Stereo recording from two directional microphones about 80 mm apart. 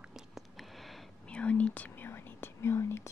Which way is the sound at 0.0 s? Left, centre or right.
Centre.